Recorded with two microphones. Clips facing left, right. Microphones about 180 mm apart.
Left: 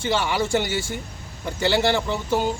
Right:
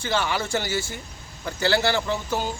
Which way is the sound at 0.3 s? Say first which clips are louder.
Left 4 dB; 15° left (ahead or behind).